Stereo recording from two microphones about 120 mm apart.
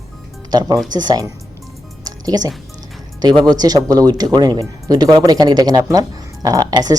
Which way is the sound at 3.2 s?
35° right (ahead or behind).